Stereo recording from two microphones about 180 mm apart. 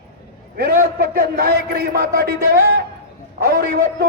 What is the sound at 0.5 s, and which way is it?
A man's voice, 55° right (ahead or behind).